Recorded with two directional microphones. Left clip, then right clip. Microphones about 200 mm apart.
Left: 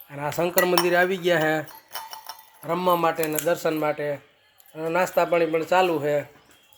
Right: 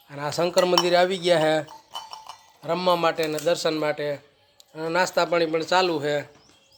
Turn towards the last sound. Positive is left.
turn(degrees=5)  # may be behind; listen again after turning